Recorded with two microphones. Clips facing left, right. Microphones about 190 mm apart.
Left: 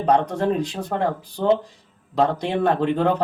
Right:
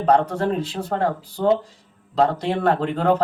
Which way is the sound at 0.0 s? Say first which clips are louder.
Right 1 dB; 15° left (ahead or behind).